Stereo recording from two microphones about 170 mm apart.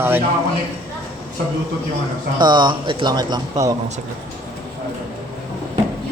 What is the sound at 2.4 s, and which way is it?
Speech, 25° right (ahead or behind).